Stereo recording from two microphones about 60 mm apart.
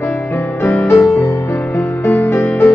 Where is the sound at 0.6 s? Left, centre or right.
Left.